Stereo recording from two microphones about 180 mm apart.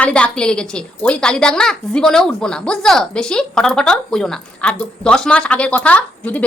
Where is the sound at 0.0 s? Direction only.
5° left (ahead or behind).